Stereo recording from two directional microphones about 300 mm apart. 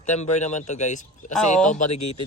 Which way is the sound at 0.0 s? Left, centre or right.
Left.